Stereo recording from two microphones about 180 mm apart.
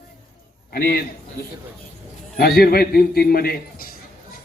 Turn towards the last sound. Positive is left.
turn(degrees=55)  # may be behind; listen again after turning